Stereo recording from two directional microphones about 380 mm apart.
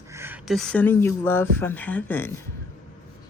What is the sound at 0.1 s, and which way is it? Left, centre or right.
Speech, centre.